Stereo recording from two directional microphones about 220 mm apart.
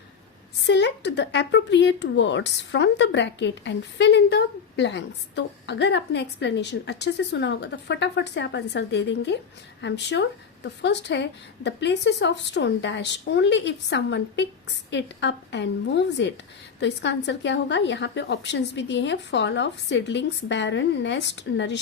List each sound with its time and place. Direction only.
0.7 s speech: 50° left (ahead or behind)